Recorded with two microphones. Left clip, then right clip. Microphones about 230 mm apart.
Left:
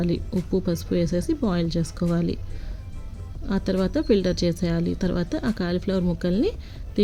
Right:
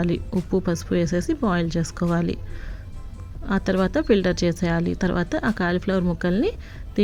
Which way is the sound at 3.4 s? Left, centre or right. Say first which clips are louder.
Right 3 dB; centre.